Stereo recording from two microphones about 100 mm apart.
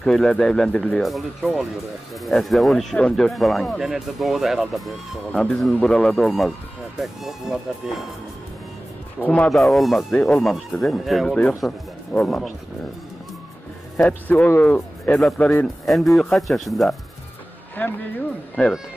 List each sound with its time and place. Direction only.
0.0 s speech: 5° left (ahead or behind)
9.2 s a man's voice: 15° left (ahead or behind)
9.5 s speech: centre (ahead or behind)
13.9 s a man's voice: 15° left (ahead or behind)
15.1 s speech: 5° left (ahead or behind)
17.8 s a man's voice: 15° left (ahead or behind)